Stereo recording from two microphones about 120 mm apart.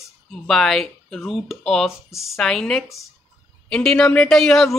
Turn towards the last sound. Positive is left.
turn(degrees=5)  # may be behind; listen again after turning